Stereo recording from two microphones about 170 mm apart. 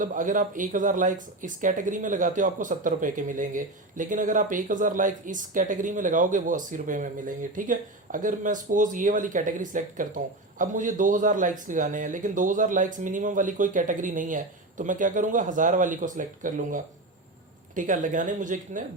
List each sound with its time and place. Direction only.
0.0 s speech: 50° right (ahead or behind)